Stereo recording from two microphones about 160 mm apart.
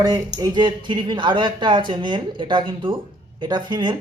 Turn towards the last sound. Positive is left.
turn(degrees=-30)  # may be behind; listen again after turning